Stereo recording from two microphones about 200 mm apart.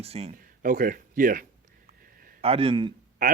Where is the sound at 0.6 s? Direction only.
45° right (ahead or behind).